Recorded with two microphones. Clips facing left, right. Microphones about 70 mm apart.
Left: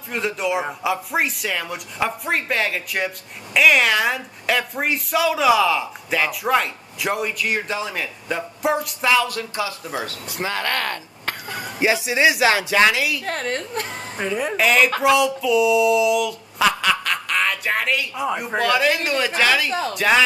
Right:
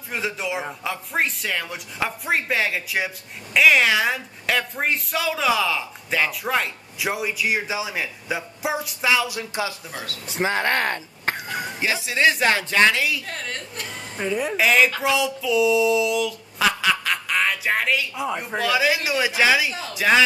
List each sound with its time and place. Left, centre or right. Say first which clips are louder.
0.1 s a woman's voice: left 4 dB; centre
9.4 s speech: left 1 dB; right
9.8 s speech: left 6 dB; left
10.2 s speech: right 6 dB; right
11.8 s speech: left 3 dB; centre
12.4 s a woman's voice: left 2 dB; centre
13.2 s a woman's voice: left 7 dB; left
14.6 s a woman's voice: left 1 dB; centre
14.9 s speech: left 6 dB; left
15.1 s a sound: left 3 dB; centre
18.6 s a woman's voice: left 2 dB; centre
19.7 s a woman's voice: left 8 dB; left
20.0 s a woman's voice: even; centre